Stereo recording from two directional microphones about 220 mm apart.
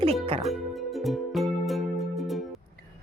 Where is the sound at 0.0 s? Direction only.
25° right (ahead or behind).